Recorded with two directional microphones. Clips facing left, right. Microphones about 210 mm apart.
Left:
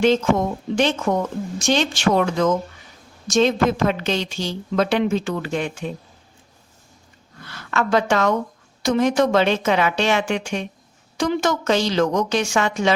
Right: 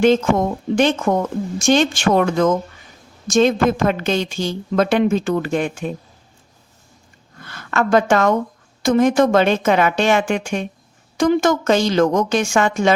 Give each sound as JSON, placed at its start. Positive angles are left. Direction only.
{"t": 0.0, "sound": "a woman's voice", "side_deg": -50}
{"t": 7.4, "sound": "a woman's voice", "side_deg": -50}